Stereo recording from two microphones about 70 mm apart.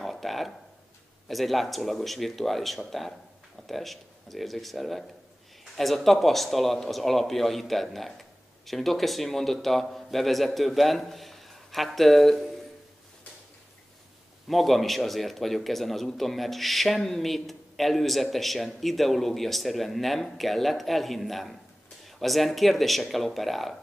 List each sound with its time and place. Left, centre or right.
0.0 s speech: centre
14.5 s speech: centre